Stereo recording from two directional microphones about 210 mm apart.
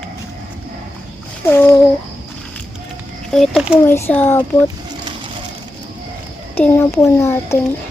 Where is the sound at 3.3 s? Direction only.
Centre (ahead or behind).